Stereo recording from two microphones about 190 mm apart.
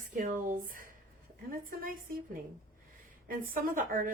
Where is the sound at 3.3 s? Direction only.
45° right (ahead or behind).